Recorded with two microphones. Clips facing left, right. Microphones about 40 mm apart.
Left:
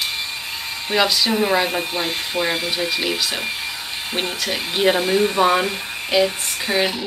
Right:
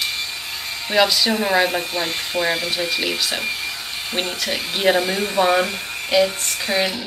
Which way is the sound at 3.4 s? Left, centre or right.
Centre.